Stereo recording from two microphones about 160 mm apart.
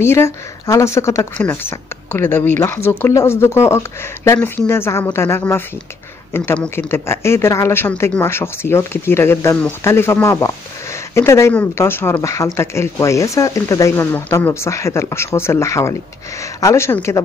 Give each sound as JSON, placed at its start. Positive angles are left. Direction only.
{"t": 0.0, "sound": "speech", "side_deg": 15}